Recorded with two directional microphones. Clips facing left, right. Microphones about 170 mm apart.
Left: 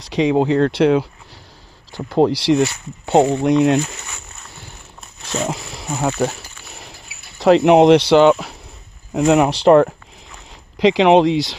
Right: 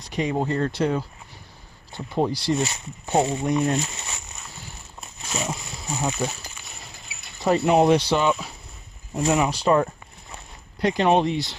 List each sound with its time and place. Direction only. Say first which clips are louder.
0.0 s speech: left 9 dB; 90° left
1.9 s speech: left 8 dB; 90° left
3.1 s speech: left 8 dB; 80° left
5.4 s speech: left 7 dB; 80° left
7.3 s speech: left 8 dB; 85° left
10.8 s speech: left 8 dB; 90° left